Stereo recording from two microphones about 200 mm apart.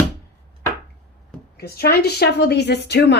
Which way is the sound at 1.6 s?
50° left (ahead or behind).